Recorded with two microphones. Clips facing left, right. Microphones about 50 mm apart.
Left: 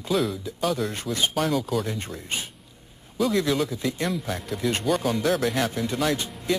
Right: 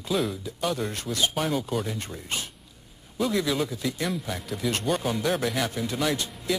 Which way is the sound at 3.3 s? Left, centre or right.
Centre.